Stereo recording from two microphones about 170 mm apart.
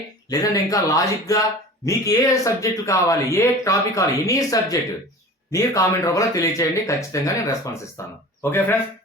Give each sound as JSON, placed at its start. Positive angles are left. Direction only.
{"t": 0.3, "sound": "speech", "side_deg": 20}